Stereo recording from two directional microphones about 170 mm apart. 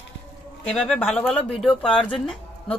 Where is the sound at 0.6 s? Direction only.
5° left (ahead or behind).